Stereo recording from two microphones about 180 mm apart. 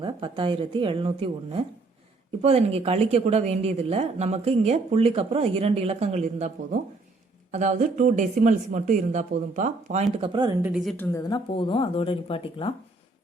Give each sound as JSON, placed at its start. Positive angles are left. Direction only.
{"t": 0.0, "sound": "speech", "side_deg": -25}
{"t": 10.2, "sound": "speech", "side_deg": -25}
{"t": 10.6, "sound": "speech", "side_deg": -5}
{"t": 10.9, "sound": "speech", "side_deg": 10}
{"t": 11.2, "sound": "speech", "side_deg": 25}